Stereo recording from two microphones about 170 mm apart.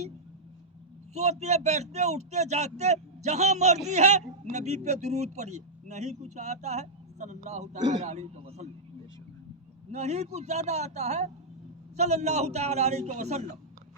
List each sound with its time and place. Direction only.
1.1 s speech: 40° right (ahead or behind)
9.9 s speech: 40° right (ahead or behind)